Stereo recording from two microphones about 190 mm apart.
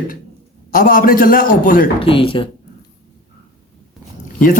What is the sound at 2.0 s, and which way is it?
Speech, 30° left (ahead or behind).